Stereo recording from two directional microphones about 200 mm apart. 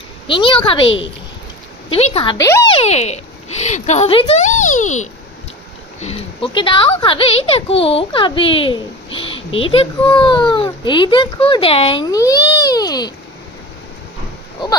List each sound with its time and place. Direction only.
0.3 s a child's voice: 25° left (ahead or behind)
2.3 s a child's voice: 15° left (ahead or behind)
2.7 s a child's voice: 30° left (ahead or behind)